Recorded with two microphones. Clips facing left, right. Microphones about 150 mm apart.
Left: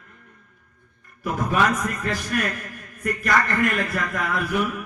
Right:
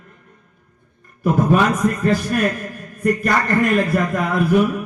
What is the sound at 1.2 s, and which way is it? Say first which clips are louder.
A man's voice: right 6 dB; 35° right (ahead or behind).